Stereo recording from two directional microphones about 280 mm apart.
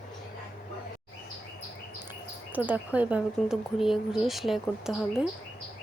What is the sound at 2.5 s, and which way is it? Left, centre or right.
Speech, centre.